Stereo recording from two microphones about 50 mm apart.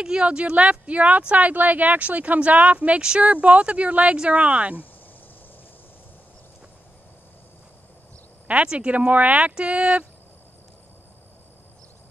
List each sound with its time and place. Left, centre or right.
0.0 s speech: centre
8.5 s speech: right